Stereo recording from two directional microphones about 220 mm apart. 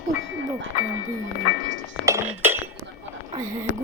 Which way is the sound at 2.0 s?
10° right (ahead or behind).